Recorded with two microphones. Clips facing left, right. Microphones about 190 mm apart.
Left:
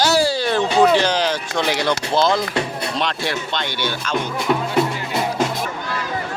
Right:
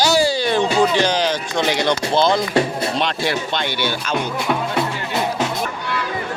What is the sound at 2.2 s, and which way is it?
Speech, 25° right (ahead or behind).